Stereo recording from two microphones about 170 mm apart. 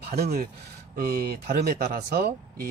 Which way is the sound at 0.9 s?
65° right (ahead or behind).